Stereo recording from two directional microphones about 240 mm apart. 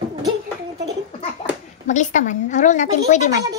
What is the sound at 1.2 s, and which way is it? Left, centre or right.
A child's voice, left.